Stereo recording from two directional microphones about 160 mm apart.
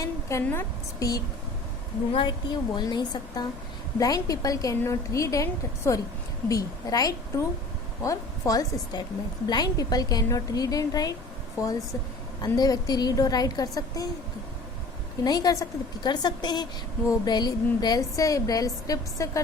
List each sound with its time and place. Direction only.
0.0 s a woman's voice: 20° left (ahead or behind)
12.4 s a woman's voice: 25° left (ahead or behind)
15.2 s a woman's voice: 25° left (ahead or behind)